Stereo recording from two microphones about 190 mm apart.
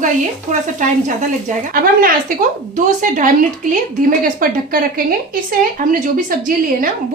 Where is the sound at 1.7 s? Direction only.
50° right (ahead or behind).